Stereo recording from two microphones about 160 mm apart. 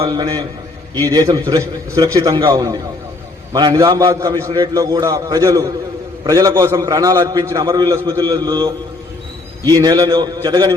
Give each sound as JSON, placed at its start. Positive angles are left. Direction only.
{"t": 0.0, "sound": "a man's voice", "side_deg": -25}